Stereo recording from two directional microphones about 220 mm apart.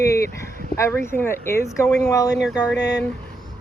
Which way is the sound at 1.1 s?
10° left (ahead or behind).